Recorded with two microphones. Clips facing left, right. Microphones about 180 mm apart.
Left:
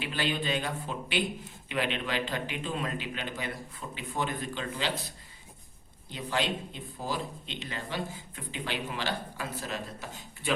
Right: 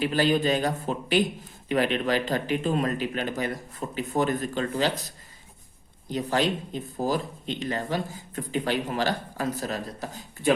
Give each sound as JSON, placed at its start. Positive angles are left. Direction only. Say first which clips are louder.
{"t": 0.0, "sound": "a man's voice", "louder": "right 9 dB", "side_deg": -40}
{"t": 6.1, "sound": "speech", "louder": "right 6 dB", "side_deg": -40}